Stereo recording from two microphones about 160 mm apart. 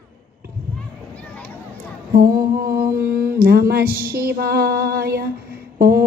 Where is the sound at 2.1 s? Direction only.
65° right (ahead or behind).